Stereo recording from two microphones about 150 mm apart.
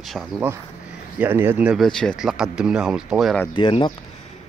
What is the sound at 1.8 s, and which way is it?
Speech, 5° left (ahead or behind).